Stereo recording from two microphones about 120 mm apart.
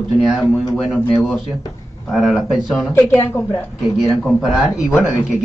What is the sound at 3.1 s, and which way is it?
Speech, 20° left (ahead or behind).